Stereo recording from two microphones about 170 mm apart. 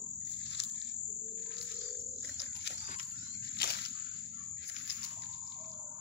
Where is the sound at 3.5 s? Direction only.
70° left (ahead or behind).